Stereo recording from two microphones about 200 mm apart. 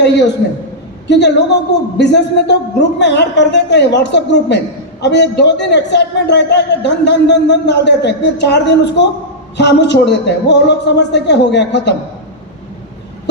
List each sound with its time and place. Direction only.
0.0 s a woman's voice: 60° left (ahead or behind)